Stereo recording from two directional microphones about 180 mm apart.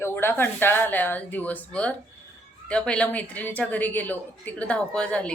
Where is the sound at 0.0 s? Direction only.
10° left (ahead or behind).